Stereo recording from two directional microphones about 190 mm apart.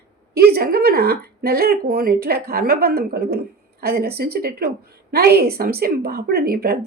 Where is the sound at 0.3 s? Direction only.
55° right (ahead or behind).